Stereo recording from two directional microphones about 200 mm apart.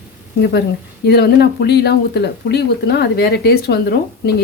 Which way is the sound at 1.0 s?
55° left (ahead or behind).